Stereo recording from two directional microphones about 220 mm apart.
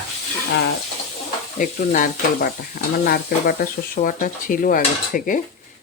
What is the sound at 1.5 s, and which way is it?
Speech, 35° left (ahead or behind).